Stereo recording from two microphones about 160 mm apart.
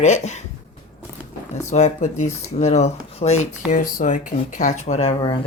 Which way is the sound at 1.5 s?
45° left (ahead or behind).